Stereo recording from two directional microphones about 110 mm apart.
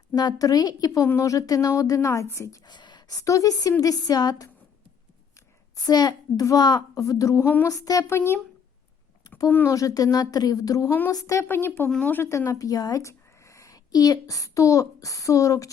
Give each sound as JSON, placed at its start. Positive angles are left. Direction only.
{"t": 0.1, "sound": "a woman's voice", "side_deg": 40}
{"t": 2.6, "sound": "a woman's voice", "side_deg": 40}
{"t": 5.7, "sound": "a woman's voice", "side_deg": 35}
{"t": 9.5, "sound": "a woman's voice", "side_deg": 20}
{"t": 9.7, "sound": "a woman's voice", "side_deg": 35}
{"t": 10.8, "sound": "a woman's voice", "side_deg": 20}
{"t": 11.1, "sound": "a woman's voice", "side_deg": 30}
{"t": 11.9, "sound": "speech", "side_deg": 5}
{"t": 12.1, "sound": "a woman's voice", "side_deg": 20}